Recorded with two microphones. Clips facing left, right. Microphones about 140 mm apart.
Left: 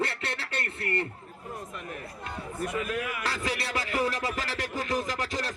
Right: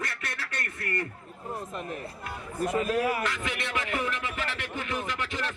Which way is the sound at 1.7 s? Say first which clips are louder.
Right 3 dB; 30° right (ahead or behind).